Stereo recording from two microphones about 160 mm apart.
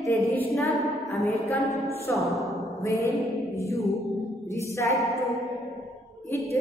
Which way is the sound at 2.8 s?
20° left (ahead or behind).